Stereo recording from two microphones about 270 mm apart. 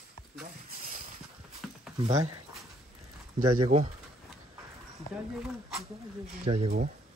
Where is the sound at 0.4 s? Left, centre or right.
Right.